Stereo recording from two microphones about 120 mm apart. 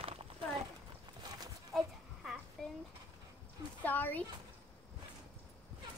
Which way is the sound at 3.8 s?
15° left (ahead or behind).